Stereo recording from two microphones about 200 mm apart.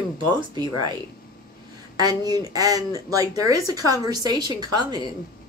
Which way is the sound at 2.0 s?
20° right (ahead or behind).